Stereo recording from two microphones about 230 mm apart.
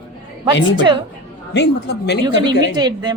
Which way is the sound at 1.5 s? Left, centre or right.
Left.